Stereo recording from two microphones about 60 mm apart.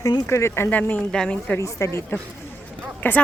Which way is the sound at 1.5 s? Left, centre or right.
Left.